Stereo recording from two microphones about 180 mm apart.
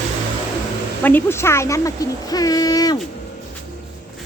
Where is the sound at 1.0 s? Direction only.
10° left (ahead or behind).